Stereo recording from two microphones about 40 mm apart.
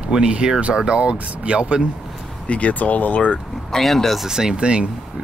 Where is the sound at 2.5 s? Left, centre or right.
Left.